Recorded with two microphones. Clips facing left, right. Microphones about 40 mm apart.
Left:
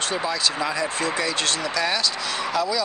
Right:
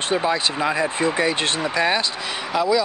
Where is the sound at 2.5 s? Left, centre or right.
Centre.